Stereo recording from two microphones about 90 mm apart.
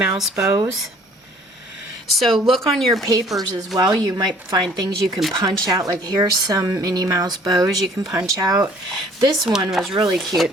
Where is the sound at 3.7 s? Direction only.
45° right (ahead or behind).